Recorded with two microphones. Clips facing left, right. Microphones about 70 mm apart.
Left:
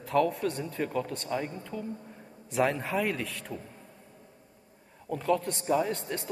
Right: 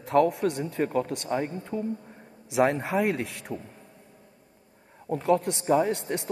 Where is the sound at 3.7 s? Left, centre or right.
Centre.